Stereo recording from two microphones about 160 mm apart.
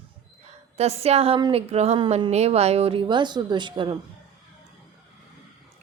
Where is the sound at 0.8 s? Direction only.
40° right (ahead or behind).